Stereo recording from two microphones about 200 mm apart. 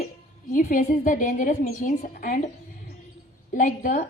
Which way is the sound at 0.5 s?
45° left (ahead or behind).